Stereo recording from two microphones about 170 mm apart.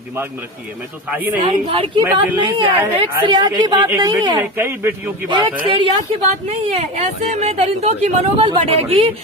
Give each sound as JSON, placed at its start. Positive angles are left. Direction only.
{"t": 1.1, "sound": "speech", "side_deg": -10}
{"t": 1.5, "sound": "a woman's voice", "side_deg": -30}
{"t": 5.6, "sound": "a woman's voice", "side_deg": -30}